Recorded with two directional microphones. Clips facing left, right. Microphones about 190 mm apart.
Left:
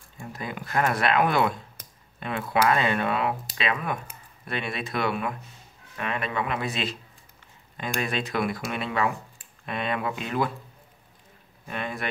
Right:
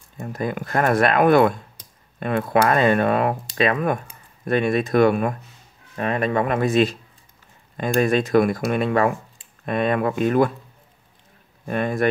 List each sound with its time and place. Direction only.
0.2 s speech: 50° right (ahead or behind)
11.6 s speech: 45° right (ahead or behind)